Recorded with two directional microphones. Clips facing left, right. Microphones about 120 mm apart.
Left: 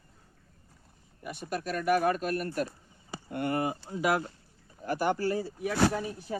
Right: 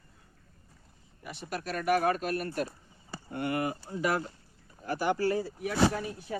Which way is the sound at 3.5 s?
25° left (ahead or behind).